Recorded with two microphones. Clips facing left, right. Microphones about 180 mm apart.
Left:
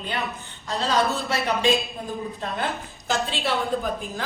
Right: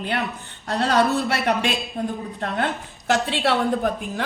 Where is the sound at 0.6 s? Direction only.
65° right (ahead or behind).